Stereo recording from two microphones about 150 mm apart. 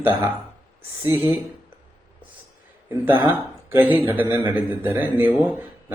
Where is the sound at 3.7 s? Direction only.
15° right (ahead or behind).